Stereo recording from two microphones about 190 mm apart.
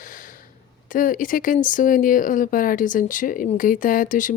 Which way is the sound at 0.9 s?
45° left (ahead or behind).